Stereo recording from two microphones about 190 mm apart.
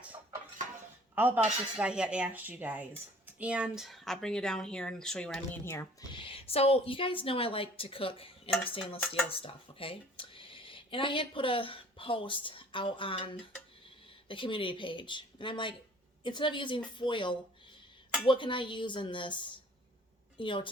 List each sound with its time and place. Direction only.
1.1 s speech: 10° right (ahead or behind)
5.7 s speech: 15° left (ahead or behind)
6.1 s speech: 30° left (ahead or behind)